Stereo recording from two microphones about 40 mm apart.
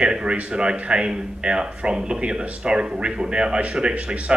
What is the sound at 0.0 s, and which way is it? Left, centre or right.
Speech, right.